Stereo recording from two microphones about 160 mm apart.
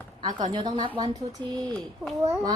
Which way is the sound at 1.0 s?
25° right (ahead or behind).